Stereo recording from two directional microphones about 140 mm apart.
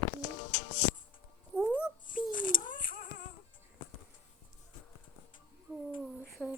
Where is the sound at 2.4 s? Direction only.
75° left (ahead or behind).